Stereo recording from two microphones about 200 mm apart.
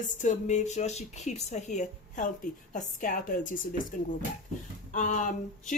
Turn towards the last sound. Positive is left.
turn(degrees=40)  # may be behind; listen again after turning